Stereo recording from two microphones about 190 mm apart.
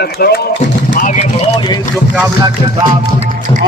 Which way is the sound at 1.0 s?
40° left (ahead or behind).